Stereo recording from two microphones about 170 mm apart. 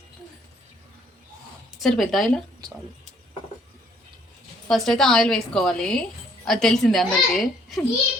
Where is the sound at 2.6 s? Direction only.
25° right (ahead or behind).